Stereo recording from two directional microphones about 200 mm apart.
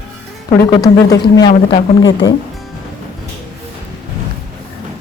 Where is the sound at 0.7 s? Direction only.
20° left (ahead or behind).